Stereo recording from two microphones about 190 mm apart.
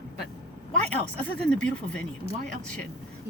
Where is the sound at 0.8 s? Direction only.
5° left (ahead or behind).